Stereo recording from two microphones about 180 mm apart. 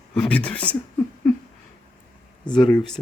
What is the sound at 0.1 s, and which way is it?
Speech, 5° left (ahead or behind).